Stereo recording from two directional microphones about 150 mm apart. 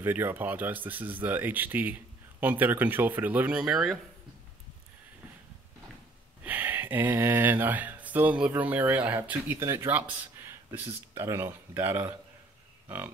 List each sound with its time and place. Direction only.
0.0 s speech: 15° right (ahead or behind)
6.4 s speech: 15° right (ahead or behind)